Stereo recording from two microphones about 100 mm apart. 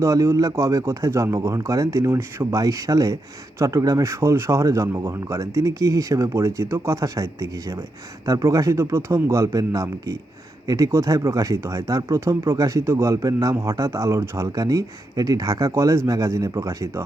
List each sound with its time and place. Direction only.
0.0 s speech: 30° right (ahead or behind)
13.1 s speech: 35° right (ahead or behind)